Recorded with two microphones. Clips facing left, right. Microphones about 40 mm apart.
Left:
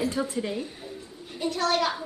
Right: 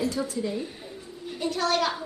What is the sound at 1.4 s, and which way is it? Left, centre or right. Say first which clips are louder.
Speech: even; centre.